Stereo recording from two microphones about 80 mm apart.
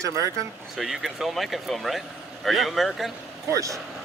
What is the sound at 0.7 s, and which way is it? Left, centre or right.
Speech, centre.